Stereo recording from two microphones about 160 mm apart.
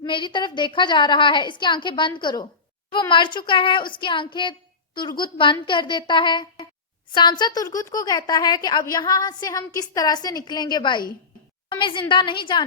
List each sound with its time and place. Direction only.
0.0 s a woman's voice: 30° left (ahead or behind)